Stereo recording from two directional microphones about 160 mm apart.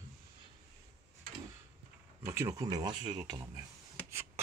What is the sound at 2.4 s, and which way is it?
Speech, 20° right (ahead or behind).